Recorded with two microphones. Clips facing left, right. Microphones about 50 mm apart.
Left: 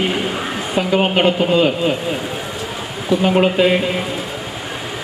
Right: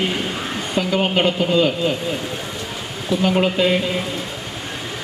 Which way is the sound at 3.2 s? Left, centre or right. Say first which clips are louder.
Left 3 dB; centre.